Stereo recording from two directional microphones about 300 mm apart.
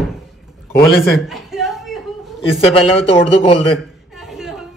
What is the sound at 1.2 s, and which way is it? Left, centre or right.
Chuckle, centre.